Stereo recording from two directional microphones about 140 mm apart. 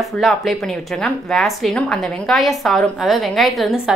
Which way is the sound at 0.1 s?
Centre (ahead or behind).